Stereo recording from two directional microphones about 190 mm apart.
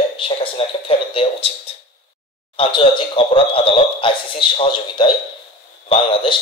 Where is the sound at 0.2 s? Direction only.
30° left (ahead or behind).